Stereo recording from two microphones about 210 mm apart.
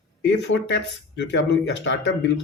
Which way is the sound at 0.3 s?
55° left (ahead or behind).